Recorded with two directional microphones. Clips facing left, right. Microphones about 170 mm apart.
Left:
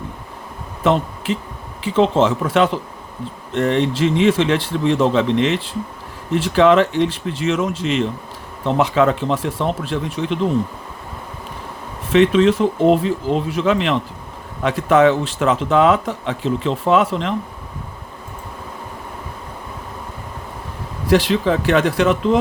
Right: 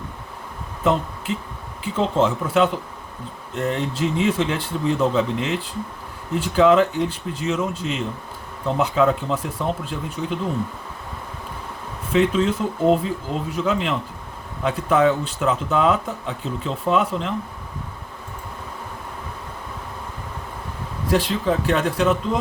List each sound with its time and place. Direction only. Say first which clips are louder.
0.9 s speech: left 4 dB; 90° left
12.1 s speech: left 6 dB; 90° left
21.1 s speech: left 5 dB; 80° left